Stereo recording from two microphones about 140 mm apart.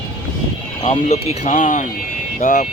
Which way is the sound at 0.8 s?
50° left (ahead or behind).